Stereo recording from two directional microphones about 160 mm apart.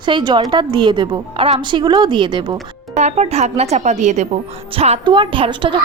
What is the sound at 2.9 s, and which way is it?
Speech, 45° right (ahead or behind).